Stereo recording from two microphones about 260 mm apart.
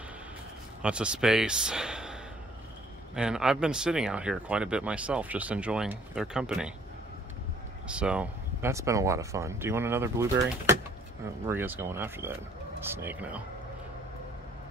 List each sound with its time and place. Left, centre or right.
0.8 s speech: centre
3.2 s speech: centre
7.9 s speech: centre